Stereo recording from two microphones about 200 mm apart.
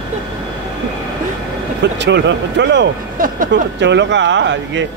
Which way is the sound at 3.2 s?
45° right (ahead or behind).